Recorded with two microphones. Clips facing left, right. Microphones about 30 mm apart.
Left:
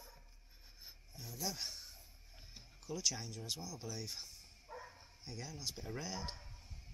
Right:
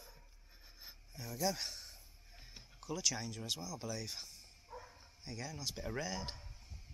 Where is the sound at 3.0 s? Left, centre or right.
Centre.